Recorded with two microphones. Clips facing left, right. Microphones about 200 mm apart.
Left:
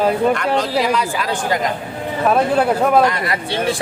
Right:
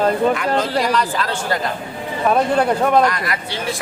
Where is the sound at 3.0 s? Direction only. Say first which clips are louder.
Left 2 dB; 25° left (ahead or behind).